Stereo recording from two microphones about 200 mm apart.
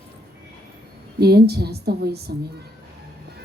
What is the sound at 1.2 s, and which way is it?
A woman's voice, 55° right (ahead or behind).